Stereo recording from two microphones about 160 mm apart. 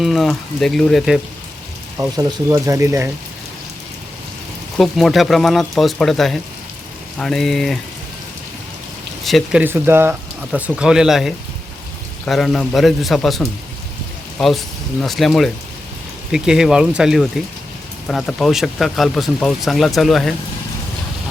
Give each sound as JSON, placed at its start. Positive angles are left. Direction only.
{"t": 0.0, "sound": "speech", "side_deg": 0}
{"t": 2.1, "sound": "speech", "side_deg": -20}
{"t": 4.8, "sound": "speech", "side_deg": 0}
{"t": 9.2, "sound": "speech", "side_deg": 0}